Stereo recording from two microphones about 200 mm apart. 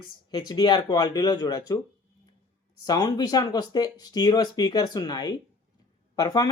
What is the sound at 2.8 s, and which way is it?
A woman's voice, 20° left (ahead or behind).